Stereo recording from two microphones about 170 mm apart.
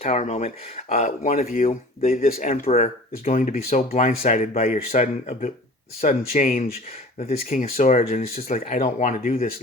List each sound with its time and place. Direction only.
0.0 s speech: 40° left (ahead or behind)
2.8 s speech: 45° left (ahead or behind)
7.3 s speech: 55° left (ahead or behind)
7.8 s speech: 40° left (ahead or behind)